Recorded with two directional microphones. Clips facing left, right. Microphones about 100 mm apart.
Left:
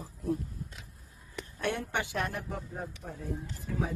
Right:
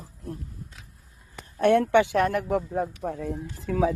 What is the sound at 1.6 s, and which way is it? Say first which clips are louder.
A man's voice: right 14 dB; 75° right (ahead or behind).